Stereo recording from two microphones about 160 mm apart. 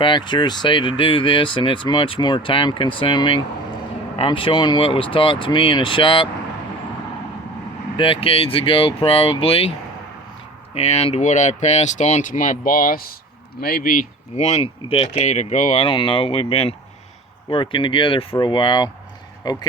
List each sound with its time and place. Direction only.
0.0 s speech: 30° left (ahead or behind)
7.9 s speech: 35° left (ahead or behind)
10.8 s speech: 40° left (ahead or behind); by 14.1 s 65° left (ahead or behind)
14.3 s speech: 45° left (ahead or behind)
15.8 s speech: 30° left (ahead or behind)